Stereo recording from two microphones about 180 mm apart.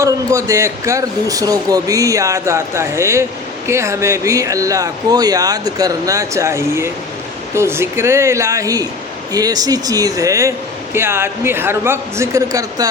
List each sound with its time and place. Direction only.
0.0 s a man's voice: 15° right (ahead or behind)